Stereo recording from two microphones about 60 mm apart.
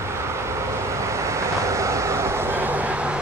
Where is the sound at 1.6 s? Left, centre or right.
Right.